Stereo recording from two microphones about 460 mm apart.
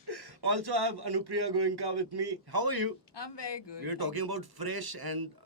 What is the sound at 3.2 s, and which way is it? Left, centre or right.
Speech, left.